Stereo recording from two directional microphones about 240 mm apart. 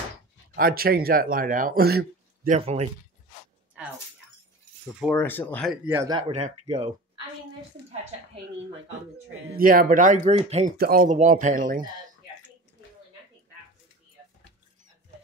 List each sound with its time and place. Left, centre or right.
0.6 s speech: right
3.8 s speech: centre
5.0 s speech: centre
5.9 s a man's voice: centre
9.6 s speech: right